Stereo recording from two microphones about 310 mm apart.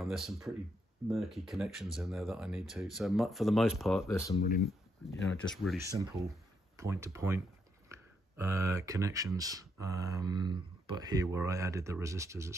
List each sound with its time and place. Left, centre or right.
0.0 s speech: centre
4.4 s speech: left
5.5 s speech: centre